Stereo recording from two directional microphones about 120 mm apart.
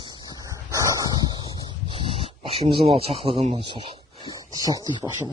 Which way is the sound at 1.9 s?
50° right (ahead or behind).